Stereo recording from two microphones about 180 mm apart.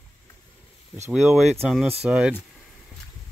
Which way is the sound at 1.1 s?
Centre (ahead or behind).